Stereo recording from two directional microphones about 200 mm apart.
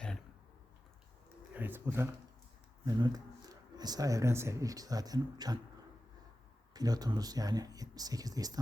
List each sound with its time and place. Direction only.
1.5 s a sound: 10° right (ahead or behind)
2.8 s speech: 20° right (ahead or behind)
6.7 s speech: 20° right (ahead or behind)